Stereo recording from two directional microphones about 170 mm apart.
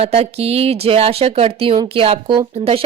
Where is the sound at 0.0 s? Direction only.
35° right (ahead or behind).